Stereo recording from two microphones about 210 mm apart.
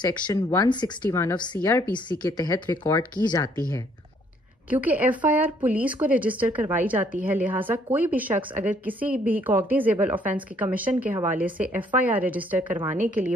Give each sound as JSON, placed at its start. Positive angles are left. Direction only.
{"t": 0.1, "sound": "speech", "side_deg": 15}
{"t": 4.6, "sound": "speech", "side_deg": -5}